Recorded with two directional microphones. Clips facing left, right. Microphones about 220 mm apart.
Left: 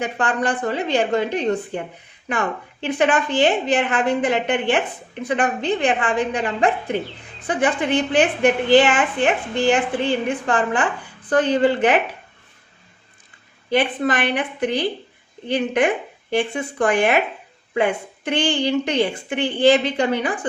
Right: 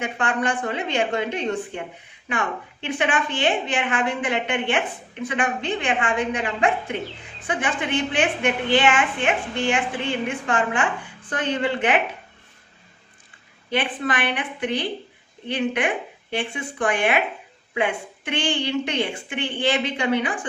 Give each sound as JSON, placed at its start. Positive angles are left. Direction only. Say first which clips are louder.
{"t": 0.0, "sound": "a woman's voice", "louder": "left 2 dB", "side_deg": 35}
{"t": 2.8, "sound": "a woman's voice", "louder": "left 5 dB", "side_deg": 40}
{"t": 13.7, "sound": "a woman's voice", "louder": "left 5 dB", "side_deg": 40}